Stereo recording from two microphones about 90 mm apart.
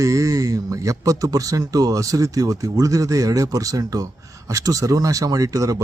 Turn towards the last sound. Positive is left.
turn(degrees=-40)  # may be behind; listen again after turning